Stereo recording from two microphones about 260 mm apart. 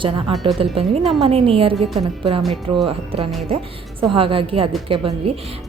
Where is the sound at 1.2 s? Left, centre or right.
Right.